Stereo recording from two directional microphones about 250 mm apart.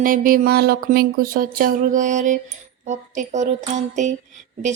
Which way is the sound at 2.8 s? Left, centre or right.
Right.